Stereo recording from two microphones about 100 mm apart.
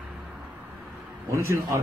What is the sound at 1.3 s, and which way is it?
Speech, 30° right (ahead or behind).